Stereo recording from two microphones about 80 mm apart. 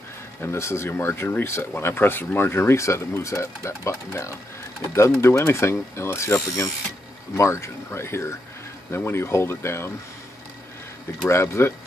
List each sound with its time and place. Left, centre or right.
0.4 s speech: left
11.2 s speech: left